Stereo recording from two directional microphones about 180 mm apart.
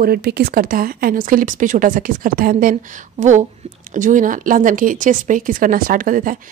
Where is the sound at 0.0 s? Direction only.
60° right (ahead or behind).